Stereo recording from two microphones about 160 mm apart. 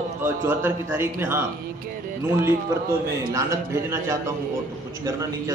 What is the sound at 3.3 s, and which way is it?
A man's voice, 20° right (ahead or behind).